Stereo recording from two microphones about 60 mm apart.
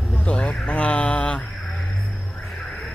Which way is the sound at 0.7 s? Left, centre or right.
Left.